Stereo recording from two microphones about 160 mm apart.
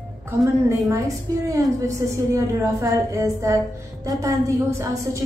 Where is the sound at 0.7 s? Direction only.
20° right (ahead or behind).